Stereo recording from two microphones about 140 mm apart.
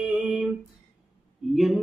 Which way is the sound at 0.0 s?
5° right (ahead or behind).